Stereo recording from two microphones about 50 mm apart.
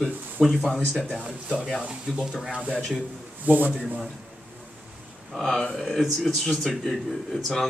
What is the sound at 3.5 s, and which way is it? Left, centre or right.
Speech, right.